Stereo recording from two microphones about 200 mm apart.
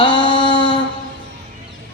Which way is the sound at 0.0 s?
25° left (ahead or behind).